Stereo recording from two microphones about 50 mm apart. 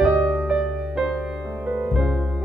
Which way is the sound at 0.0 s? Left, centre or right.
Right.